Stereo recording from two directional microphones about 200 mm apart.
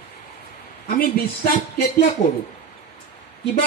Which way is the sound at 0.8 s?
45° left (ahead or behind).